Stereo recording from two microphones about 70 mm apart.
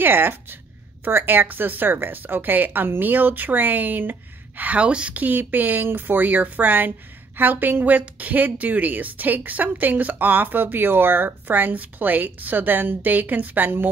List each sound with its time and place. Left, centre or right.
0.0 s a woman's voice: right